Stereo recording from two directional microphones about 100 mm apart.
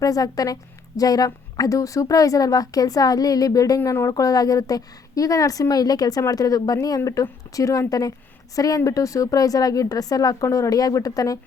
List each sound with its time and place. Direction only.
0.0 s a woman's voice: 35° left (ahead or behind)